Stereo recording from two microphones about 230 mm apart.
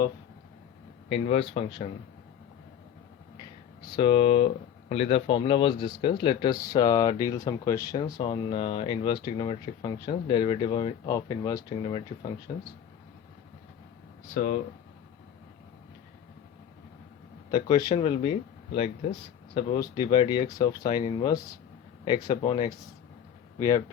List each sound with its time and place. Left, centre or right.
1.1 s speech: left
3.8 s speech: left
14.3 s speech: left
17.5 s speech: centre